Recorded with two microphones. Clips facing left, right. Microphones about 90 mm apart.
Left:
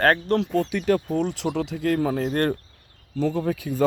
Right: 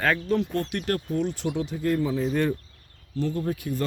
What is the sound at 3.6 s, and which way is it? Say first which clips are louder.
Speech: left 1 dB; 70° left (ahead or behind).